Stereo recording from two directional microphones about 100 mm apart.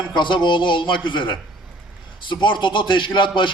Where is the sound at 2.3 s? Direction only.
55° left (ahead or behind).